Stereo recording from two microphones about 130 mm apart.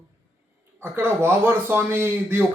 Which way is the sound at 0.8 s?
15° right (ahead or behind).